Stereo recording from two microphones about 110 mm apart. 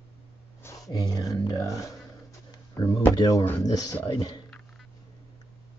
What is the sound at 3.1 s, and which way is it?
Speech, 35° left (ahead or behind).